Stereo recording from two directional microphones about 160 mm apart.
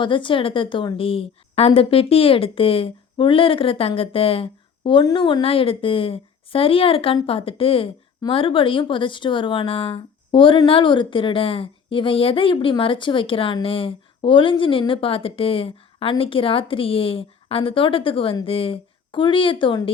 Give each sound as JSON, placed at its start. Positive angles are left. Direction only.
{"t": 0.0, "sound": "speech", "side_deg": 30}